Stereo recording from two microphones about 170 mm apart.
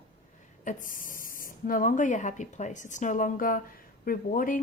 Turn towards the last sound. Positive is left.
turn(degrees=55)  # may be behind; listen again after turning